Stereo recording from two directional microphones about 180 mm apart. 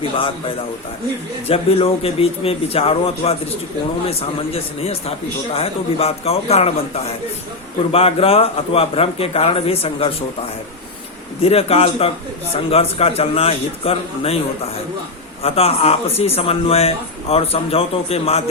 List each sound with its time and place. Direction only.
0.2 s a man's voice: 30° left (ahead or behind)
4.5 s speech: 35° left (ahead or behind)
11.4 s speech: 35° left (ahead or behind)
15.4 s speech: 35° left (ahead or behind)